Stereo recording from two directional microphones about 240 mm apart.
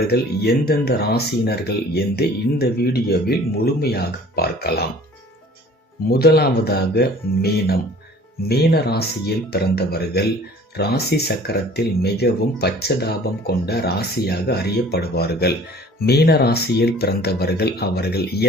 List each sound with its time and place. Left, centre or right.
0.1 s speech: left
6.1 s speech: left